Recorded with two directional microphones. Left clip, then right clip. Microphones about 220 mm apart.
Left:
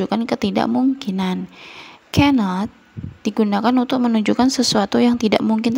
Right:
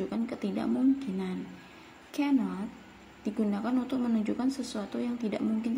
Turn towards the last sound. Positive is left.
turn(degrees=45)  # may be behind; listen again after turning